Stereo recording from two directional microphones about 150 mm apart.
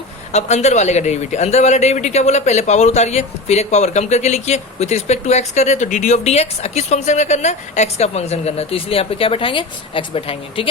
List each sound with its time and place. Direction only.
0.3 s speech: 50° left (ahead or behind)